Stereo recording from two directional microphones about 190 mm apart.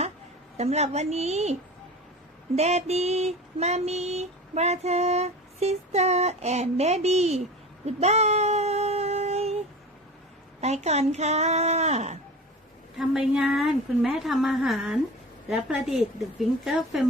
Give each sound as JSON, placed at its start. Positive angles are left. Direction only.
{"t": 0.5, "sound": "female singing", "side_deg": -35}
{"t": 2.6, "sound": "female singing", "side_deg": -35}
{"t": 7.9, "sound": "child singing", "side_deg": -35}
{"t": 10.6, "sound": "female singing", "side_deg": -35}
{"t": 13.0, "sound": "a woman's voice", "side_deg": -5}